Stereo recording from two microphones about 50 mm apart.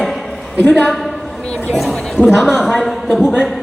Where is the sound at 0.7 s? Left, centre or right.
Left.